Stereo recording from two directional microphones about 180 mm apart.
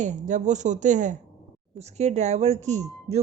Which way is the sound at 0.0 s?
45° right (ahead or behind).